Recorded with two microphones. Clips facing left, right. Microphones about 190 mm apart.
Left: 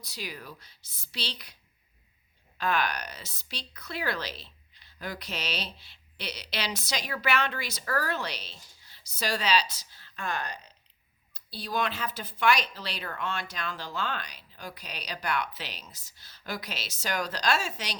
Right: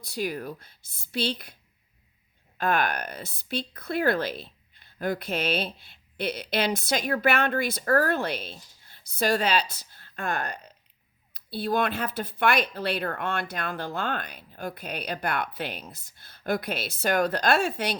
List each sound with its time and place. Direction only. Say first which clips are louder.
0.0 s speech: right 10 dB; 50° right (ahead or behind)
2.6 s speech: right 3 dB; 50° right (ahead or behind)